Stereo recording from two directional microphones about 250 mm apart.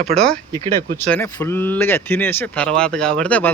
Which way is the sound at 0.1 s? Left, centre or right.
Centre.